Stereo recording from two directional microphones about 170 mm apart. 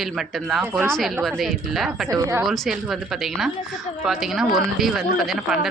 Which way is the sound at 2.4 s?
Centre (ahead or behind).